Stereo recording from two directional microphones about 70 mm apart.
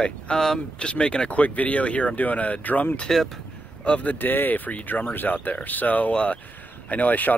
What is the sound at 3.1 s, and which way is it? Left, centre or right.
Speech, centre.